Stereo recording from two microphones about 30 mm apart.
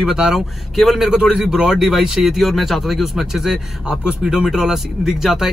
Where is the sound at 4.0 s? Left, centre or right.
Right.